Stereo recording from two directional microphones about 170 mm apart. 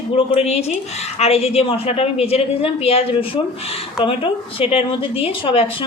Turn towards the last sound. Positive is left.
turn(degrees=30)  # may be behind; listen again after turning